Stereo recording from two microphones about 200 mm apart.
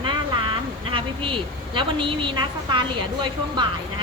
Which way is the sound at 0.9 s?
25° right (ahead or behind).